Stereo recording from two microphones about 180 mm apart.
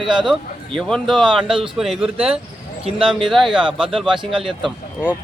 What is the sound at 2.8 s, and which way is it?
Speech, 30° right (ahead or behind).